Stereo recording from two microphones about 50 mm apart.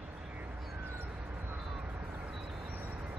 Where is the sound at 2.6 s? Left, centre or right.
Right.